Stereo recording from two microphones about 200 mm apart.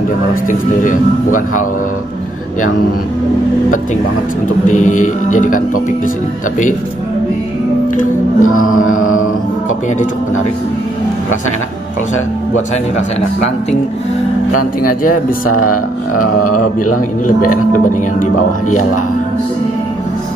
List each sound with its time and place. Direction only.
0.3 s speech: 40° left (ahead or behind)
4.6 s speech: 40° left (ahead or behind)
8.4 s mantra: 90° left
14.8 s speech: 45° left (ahead or behind)
17.4 s speech: 40° left (ahead or behind)